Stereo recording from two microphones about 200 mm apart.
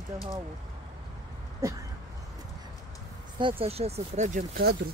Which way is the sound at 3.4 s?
25° right (ahead or behind).